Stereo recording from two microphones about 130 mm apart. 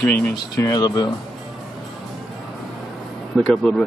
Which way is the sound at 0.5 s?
25° left (ahead or behind).